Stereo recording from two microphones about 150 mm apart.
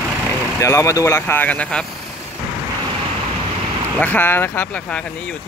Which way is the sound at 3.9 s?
10° left (ahead or behind).